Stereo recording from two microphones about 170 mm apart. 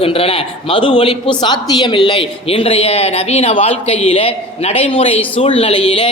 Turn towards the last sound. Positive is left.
turn(degrees=35)  # may be behind; listen again after turning